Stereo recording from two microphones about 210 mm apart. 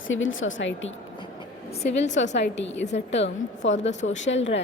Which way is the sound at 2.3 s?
60° left (ahead or behind).